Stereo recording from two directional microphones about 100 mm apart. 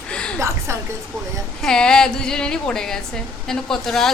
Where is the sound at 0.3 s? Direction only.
30° right (ahead or behind).